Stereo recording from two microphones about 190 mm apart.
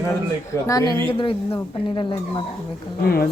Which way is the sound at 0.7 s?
20° left (ahead or behind).